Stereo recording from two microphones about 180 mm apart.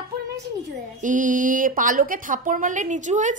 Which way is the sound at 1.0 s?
45° right (ahead or behind).